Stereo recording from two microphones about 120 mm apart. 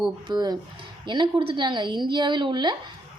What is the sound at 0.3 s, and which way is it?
A woman's voice, 35° right (ahead or behind).